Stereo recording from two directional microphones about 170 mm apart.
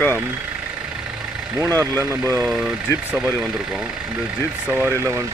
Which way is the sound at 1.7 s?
20° right (ahead or behind).